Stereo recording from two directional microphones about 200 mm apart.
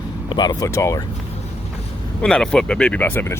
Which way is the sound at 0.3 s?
20° left (ahead or behind).